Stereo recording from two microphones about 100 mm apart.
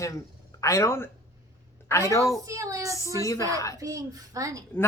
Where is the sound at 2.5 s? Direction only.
30° right (ahead or behind).